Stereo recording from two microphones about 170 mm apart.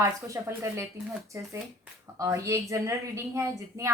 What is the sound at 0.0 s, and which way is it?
Speech, 15° right (ahead or behind).